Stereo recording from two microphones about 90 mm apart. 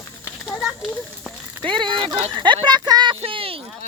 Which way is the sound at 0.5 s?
Centre (ahead or behind).